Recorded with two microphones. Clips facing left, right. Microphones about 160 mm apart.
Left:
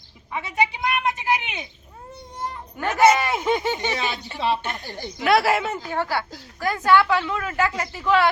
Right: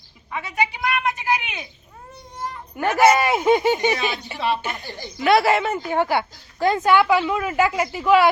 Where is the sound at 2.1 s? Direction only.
25° left (ahead or behind).